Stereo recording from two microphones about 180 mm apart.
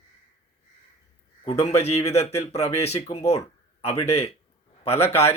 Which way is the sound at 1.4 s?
35° left (ahead or behind).